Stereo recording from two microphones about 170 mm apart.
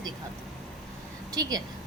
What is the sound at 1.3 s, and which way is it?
Speech, 20° right (ahead or behind).